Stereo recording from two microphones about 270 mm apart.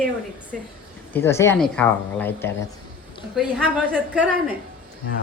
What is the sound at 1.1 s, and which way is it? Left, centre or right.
Speech, centre.